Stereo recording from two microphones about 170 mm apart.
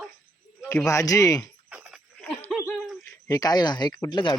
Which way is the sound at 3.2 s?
20° left (ahead or behind).